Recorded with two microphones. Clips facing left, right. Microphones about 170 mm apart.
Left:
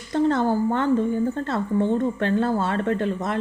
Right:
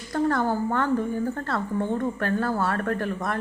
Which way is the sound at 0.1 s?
20° left (ahead or behind).